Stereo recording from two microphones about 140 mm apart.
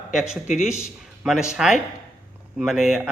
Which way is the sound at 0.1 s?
5° right (ahead or behind).